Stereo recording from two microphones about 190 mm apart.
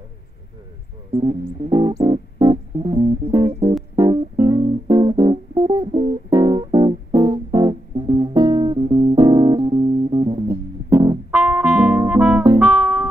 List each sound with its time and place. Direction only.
1.2 s music: 20° right (ahead or behind)
11.3 s music: 10° right (ahead or behind)